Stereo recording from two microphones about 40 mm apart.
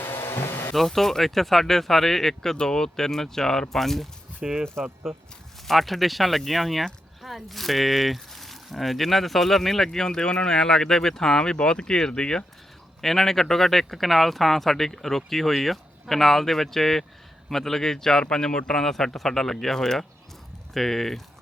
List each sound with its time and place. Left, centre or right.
0.0 s a sound: left
0.7 s speech: centre
4.4 s speech: centre
5.6 s speech: centre